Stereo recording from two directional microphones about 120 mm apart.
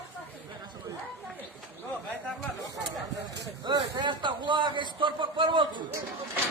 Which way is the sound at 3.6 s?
40° right (ahead or behind).